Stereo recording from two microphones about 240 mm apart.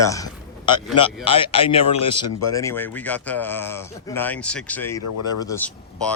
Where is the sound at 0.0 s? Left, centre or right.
Centre.